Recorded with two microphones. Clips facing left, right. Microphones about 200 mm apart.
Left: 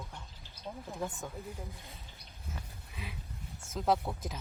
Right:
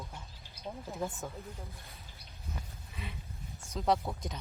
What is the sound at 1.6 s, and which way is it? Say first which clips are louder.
Speech: left 3 dB; 15° left (ahead or behind).